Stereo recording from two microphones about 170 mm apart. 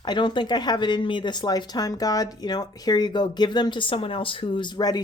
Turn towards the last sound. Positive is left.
turn(degrees=25)  # may be behind; listen again after turning